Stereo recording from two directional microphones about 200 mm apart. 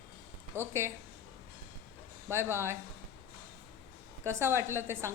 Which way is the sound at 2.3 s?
10° right (ahead or behind).